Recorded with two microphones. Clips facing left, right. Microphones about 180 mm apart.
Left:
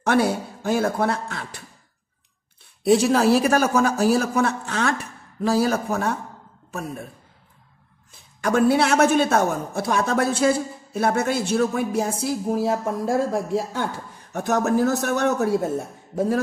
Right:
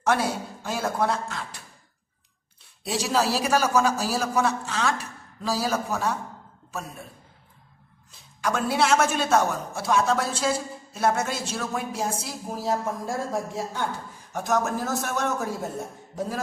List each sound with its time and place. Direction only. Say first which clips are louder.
0.0 s a man's voice: left 4 dB; 60° left (ahead or behind)
2.8 s a man's voice: left 8 dB; 55° left (ahead or behind)
8.1 s a man's voice: left 5 dB; 50° left (ahead or behind)